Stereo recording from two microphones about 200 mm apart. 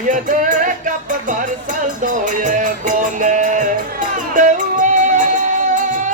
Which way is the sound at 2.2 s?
40° right (ahead or behind).